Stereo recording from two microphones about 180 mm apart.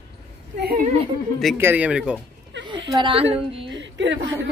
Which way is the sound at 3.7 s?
90° right.